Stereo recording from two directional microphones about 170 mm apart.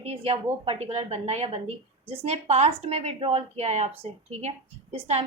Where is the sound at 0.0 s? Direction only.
35° right (ahead or behind).